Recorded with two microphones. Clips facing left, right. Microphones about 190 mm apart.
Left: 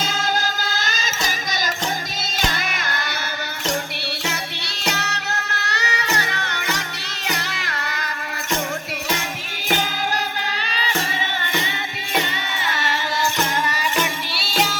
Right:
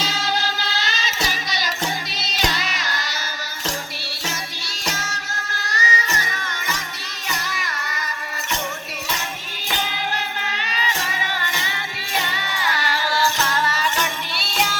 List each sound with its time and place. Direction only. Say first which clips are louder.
0.0 s music: left 1 dB; 50° left (ahead or behind)
2.4 s music: right 1 dB; 50° left (ahead or behind)
4.9 s music: left 4 dB; 65° left (ahead or behind)
12.6 s music: right 1 dB; 25° left (ahead or behind); by 14.8 s centre (ahead or behind)